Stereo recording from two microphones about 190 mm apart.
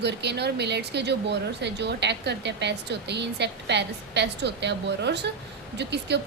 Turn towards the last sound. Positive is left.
turn(degrees=-65)  # may be behind; listen again after turning